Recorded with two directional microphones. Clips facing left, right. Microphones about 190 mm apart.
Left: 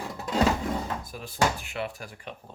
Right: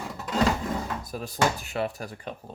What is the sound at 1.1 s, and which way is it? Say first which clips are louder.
Cutlery: right 1 dB; 40° right (ahead or behind).